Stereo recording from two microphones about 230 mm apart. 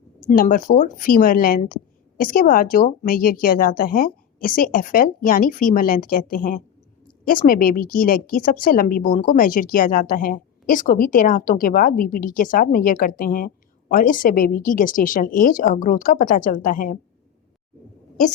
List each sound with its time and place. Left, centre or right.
0.3 s a woman's voice: left